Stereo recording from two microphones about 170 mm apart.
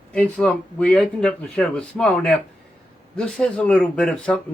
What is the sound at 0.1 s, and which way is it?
Speech, 5° left (ahead or behind).